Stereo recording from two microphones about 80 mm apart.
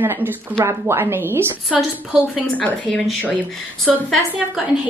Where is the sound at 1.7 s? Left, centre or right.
Centre.